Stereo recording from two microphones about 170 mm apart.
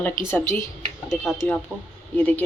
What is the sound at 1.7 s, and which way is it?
Speech, 5° right (ahead or behind).